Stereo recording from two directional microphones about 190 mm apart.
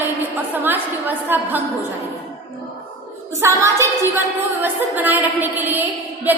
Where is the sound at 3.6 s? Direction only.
15° right (ahead or behind).